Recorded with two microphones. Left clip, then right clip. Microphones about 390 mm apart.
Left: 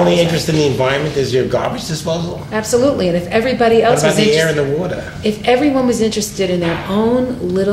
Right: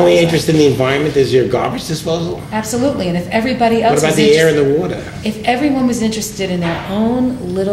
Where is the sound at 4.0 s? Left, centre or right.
Right.